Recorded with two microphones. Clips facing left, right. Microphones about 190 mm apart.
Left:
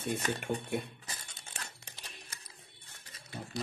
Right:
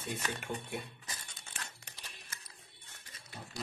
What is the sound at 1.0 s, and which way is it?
Music, 35° left (ahead or behind).